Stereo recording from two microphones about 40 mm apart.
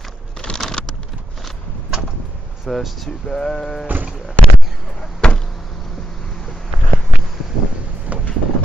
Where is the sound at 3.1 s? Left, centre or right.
Centre.